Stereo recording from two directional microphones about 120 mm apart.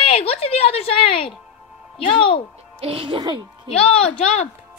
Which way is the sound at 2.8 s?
50° right (ahead or behind).